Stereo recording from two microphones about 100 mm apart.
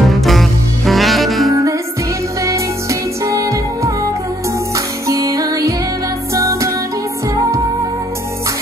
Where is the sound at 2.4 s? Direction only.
30° right (ahead or behind).